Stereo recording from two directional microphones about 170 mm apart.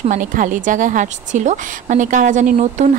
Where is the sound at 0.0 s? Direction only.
50° right (ahead or behind).